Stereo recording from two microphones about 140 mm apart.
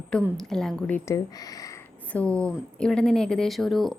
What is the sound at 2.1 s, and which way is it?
A woman's voice, 10° left (ahead or behind).